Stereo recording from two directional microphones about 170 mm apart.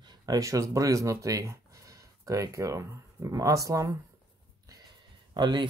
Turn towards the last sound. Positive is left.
turn(degrees=-25)  # may be behind; listen again after turning